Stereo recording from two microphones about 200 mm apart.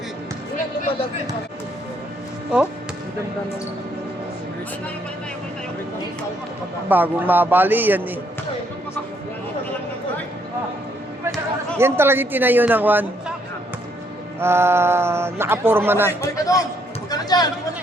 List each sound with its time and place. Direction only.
6.8 s speech: 10° right (ahead or behind)
11.8 s speech: 10° right (ahead or behind)
14.3 s speech: 10° right (ahead or behind)
16.3 s a man's voice: 15° left (ahead or behind)
17.1 s chatter: 20° left (ahead or behind)